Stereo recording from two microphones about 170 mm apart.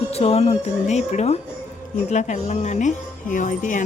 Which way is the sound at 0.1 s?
35° left (ahead or behind).